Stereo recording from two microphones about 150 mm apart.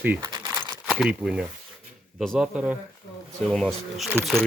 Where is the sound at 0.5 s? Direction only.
10° right (ahead or behind).